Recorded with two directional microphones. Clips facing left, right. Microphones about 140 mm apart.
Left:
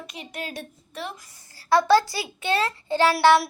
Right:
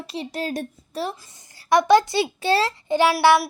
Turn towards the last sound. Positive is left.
turn(degrees=-5)  # may be behind; listen again after turning